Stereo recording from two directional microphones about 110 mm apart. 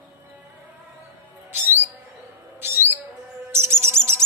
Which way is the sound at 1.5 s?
20° right (ahead or behind).